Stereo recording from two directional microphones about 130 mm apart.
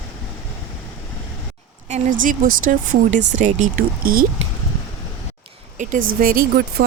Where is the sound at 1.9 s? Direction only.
90° right.